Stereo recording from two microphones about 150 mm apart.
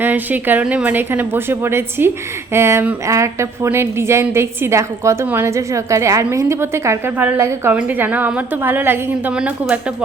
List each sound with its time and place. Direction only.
0.0 s a woman's voice: 10° right (ahead or behind)